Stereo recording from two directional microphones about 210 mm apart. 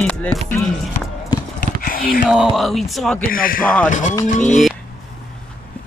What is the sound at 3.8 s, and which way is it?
Music, 35° left (ahead or behind).